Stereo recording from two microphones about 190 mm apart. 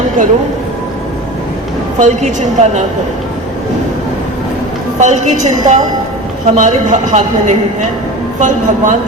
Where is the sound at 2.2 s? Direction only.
35° right (ahead or behind).